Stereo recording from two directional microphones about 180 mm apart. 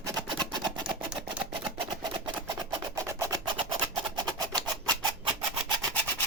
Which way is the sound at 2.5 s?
20° right (ahead or behind).